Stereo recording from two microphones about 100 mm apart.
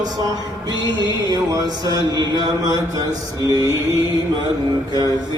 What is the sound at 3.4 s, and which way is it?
Mantra, 35° right (ahead or behind).